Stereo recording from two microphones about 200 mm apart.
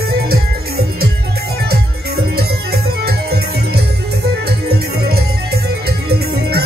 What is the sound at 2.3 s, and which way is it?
Music, 50° right (ahead or behind).